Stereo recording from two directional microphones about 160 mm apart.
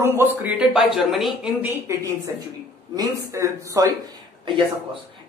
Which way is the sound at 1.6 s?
15° right (ahead or behind).